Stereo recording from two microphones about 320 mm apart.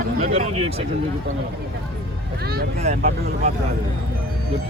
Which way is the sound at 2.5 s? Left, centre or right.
Right.